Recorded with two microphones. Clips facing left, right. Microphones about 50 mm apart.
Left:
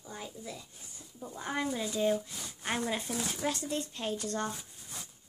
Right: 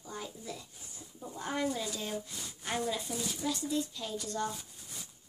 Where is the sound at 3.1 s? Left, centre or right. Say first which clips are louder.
Left 2 dB; left.